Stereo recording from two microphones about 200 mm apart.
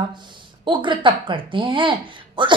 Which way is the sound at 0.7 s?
25° right (ahead or behind).